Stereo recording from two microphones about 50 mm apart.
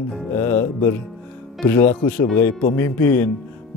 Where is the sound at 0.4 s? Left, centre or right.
Left.